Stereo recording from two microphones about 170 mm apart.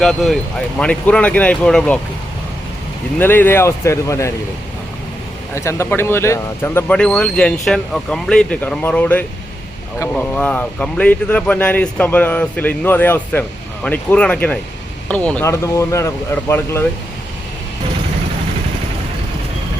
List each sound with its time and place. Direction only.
0.0 s speech: centre (ahead or behind)
3.2 s speech: 10° left (ahead or behind)
5.5 s speech: 15° left (ahead or behind)